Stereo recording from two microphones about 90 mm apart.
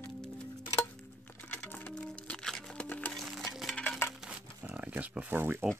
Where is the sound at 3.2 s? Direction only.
Centre (ahead or behind).